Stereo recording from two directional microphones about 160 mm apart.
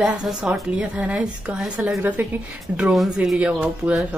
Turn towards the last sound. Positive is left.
turn(degrees=-5)  # may be behind; listen again after turning